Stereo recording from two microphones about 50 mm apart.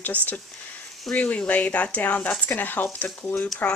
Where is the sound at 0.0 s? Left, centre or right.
Left.